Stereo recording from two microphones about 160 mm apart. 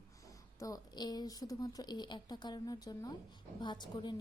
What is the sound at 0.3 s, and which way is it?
Speech, 20° left (ahead or behind).